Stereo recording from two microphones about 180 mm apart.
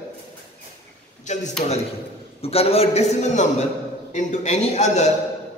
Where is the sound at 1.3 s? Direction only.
40° left (ahead or behind).